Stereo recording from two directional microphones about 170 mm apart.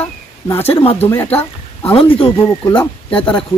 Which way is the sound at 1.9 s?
35° left (ahead or behind).